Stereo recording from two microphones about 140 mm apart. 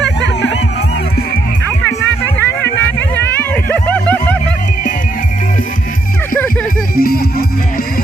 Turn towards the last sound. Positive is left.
turn(degrees=90)